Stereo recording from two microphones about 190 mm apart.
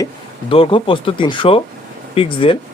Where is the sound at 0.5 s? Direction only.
30° left (ahead or behind).